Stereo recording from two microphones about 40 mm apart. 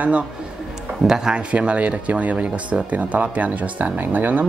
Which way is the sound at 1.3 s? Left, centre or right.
Right.